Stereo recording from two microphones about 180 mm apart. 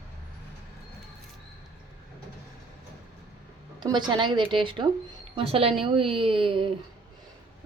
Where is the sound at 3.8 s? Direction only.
25° right (ahead or behind).